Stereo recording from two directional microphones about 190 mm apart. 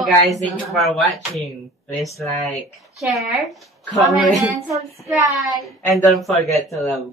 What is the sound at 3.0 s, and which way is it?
Speech, centre (ahead or behind).